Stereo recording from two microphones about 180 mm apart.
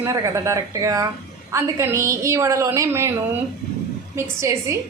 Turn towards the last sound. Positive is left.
turn(degrees=-15)  # may be behind; listen again after turning